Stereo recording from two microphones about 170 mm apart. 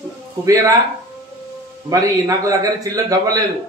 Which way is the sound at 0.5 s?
20° right (ahead or behind).